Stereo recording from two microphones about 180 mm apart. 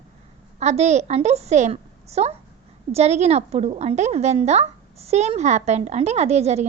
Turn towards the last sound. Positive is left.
turn(degrees=-35)  # may be behind; listen again after turning